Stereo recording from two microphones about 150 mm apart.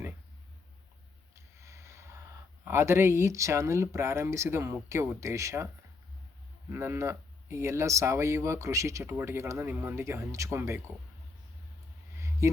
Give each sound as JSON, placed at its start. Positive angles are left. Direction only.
{"t": 1.6, "sound": "a sound", "side_deg": -20}
{"t": 2.6, "sound": "speech", "side_deg": -15}
{"t": 6.7, "sound": "speech", "side_deg": -15}